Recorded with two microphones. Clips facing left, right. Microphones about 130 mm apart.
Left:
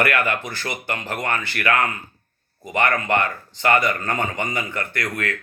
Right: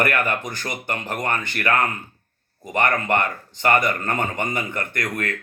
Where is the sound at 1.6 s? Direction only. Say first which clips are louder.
Even; 45° right (ahead or behind).